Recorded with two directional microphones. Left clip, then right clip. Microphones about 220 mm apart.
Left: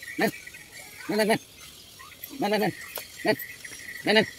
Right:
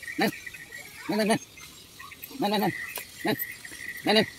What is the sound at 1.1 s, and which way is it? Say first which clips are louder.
Speech: left 2 dB; 30° left (ahead or behind).